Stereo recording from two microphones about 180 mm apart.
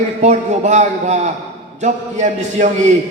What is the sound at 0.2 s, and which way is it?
A man's voice, 40° right (ahead or behind).